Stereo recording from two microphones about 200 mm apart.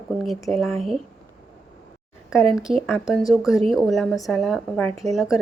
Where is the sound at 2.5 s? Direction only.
Centre (ahead or behind).